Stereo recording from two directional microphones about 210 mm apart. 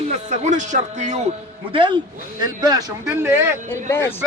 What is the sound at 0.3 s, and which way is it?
Speech, 35° right (ahead or behind).